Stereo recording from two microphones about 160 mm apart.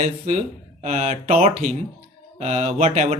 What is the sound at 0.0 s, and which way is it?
Speech, 50° right (ahead or behind).